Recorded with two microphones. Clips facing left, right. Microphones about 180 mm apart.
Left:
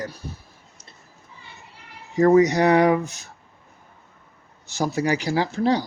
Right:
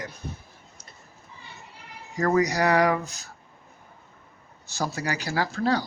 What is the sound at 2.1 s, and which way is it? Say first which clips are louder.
Speech: left 7 dB; 25° left (ahead or behind).